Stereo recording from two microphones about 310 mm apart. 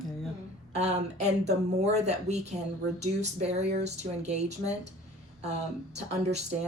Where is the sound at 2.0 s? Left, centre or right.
Right.